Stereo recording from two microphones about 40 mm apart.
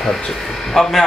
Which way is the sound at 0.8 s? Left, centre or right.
Centre.